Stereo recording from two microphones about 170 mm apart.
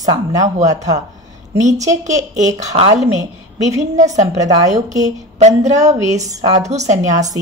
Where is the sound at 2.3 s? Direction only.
40° right (ahead or behind).